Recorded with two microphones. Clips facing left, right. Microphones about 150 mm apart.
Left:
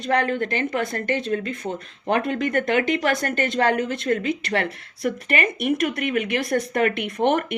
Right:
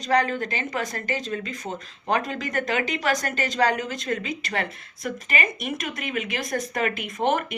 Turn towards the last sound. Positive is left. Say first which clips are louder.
# left 3 dB
turn(degrees=65)  # may be behind; listen again after turning